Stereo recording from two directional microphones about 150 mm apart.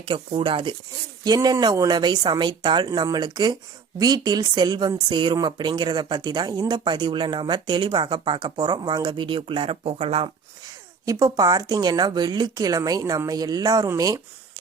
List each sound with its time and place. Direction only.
0.0 s speech: 35° right (ahead or behind)
11.0 s speech: 25° right (ahead or behind)